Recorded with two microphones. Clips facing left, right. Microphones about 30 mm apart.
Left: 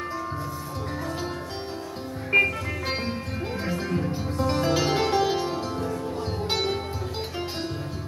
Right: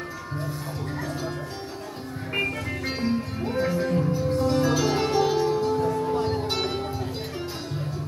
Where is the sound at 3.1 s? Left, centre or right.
Centre.